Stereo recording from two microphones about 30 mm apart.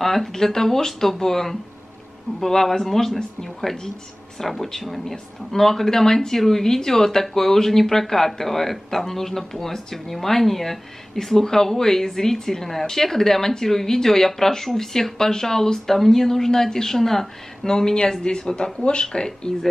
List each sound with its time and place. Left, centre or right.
0.0 s speech: centre
4.4 s speech: centre; by 19.5 s left